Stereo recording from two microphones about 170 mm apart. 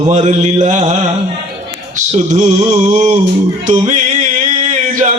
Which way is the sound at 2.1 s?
45° right (ahead or behind).